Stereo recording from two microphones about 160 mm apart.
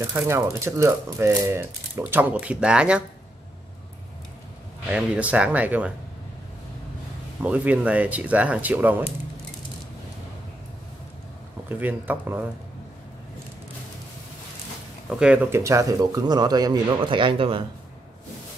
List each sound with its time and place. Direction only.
0.0 s speech: 15° right (ahead or behind)
4.9 s speech: 5° right (ahead or behind)
7.4 s speech: 10° right (ahead or behind)
11.7 s speech: 10° right (ahead or behind)
15.0 s speech: 5° right (ahead or behind); by 17.6 s 35° right (ahead or behind)